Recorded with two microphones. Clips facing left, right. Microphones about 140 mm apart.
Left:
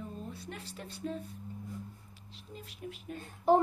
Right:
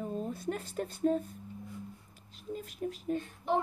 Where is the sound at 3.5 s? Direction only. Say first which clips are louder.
Left 6 dB; 35° left (ahead or behind).